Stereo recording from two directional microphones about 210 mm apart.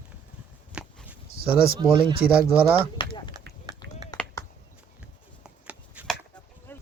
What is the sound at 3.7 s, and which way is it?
Run, 20° right (ahead or behind).